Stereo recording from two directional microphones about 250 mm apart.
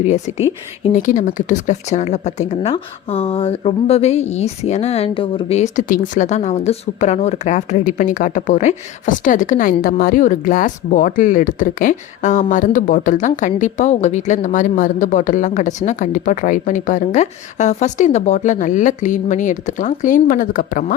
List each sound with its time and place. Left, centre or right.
0.0 s speech: left